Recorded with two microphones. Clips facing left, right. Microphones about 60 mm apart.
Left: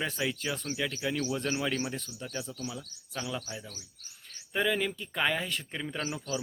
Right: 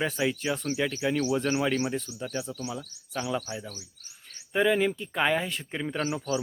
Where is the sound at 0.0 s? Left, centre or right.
Centre.